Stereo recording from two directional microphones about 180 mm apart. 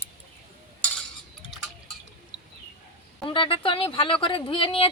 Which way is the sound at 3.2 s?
30° left (ahead or behind).